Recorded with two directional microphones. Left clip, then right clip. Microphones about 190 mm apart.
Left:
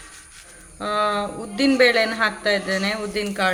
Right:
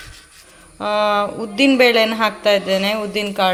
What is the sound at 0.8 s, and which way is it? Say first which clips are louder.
Speech: right 5 dB; 20° right (ahead or behind).